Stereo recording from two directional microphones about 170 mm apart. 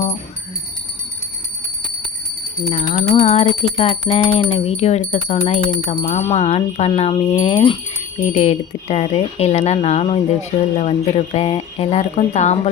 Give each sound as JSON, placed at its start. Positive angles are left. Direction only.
{"t": 2.7, "sound": "a sound", "side_deg": 50}
{"t": 3.0, "sound": "jingle bell", "side_deg": 40}
{"t": 8.2, "sound": "jingle bell", "side_deg": 40}